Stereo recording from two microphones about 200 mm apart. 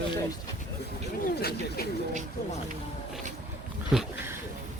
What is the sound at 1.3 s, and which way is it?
Speech, 50° left (ahead or behind).